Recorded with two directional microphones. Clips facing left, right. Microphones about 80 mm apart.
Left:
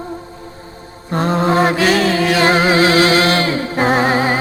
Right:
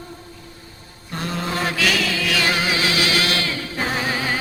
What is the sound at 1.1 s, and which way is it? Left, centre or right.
Chant, left.